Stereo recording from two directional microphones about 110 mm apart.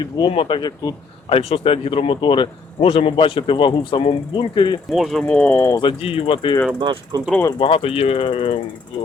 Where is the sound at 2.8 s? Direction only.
65° left (ahead or behind); by 4.7 s 50° left (ahead or behind).